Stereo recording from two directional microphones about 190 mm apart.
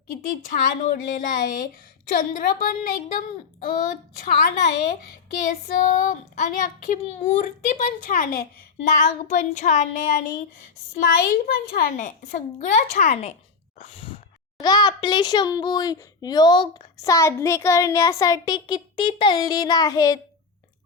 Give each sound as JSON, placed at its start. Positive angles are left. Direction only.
{"t": 0.9, "sound": "speech", "side_deg": 45}
{"t": 5.6, "sound": "speech", "side_deg": 45}
{"t": 11.0, "sound": "speech", "side_deg": 50}
{"t": 13.7, "sound": "a sound", "side_deg": 30}
{"t": 14.6, "sound": "speech", "side_deg": 20}